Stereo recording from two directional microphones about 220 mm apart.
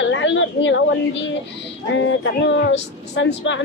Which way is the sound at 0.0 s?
55° left (ahead or behind).